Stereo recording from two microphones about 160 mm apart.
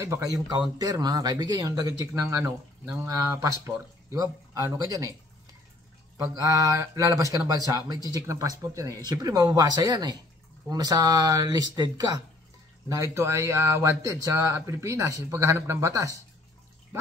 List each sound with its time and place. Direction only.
0.0 s speech: 20° right (ahead or behind)
6.3 s speech: 20° right (ahead or behind)